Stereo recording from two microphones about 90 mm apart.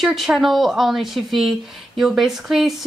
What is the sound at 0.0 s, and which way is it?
Speech, centre (ahead or behind).